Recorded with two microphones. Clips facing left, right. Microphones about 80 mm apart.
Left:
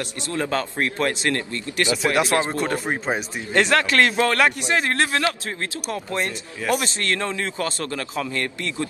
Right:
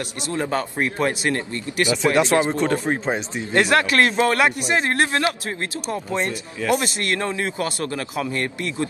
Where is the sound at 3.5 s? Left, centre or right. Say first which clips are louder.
Right 1 dB; right.